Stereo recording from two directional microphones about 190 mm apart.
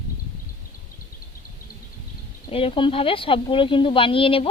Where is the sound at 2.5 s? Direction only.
30° left (ahead or behind).